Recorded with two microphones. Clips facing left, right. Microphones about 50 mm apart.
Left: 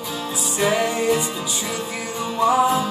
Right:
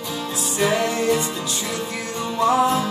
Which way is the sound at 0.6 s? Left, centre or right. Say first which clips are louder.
Even; centre.